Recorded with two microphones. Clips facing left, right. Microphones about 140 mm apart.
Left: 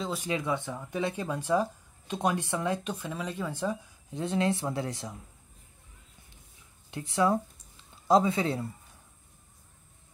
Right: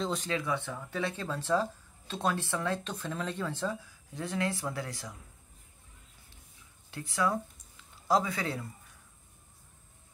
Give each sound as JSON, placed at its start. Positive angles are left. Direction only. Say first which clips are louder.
{"t": 0.0, "sound": "speech", "louder": "right 1 dB", "side_deg": 5}
{"t": 0.3, "sound": "speech", "louder": "left 2 dB", "side_deg": 20}
{"t": 6.9, "sound": "speech", "louder": "left 5 dB", "side_deg": 25}